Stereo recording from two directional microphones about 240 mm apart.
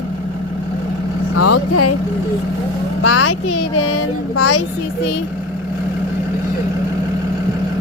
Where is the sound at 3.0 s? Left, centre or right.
Left.